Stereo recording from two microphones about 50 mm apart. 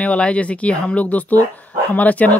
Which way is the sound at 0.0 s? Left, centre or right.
Left.